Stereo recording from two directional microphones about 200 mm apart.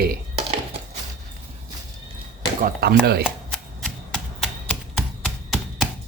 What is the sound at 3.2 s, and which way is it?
Typewriter, centre (ahead or behind).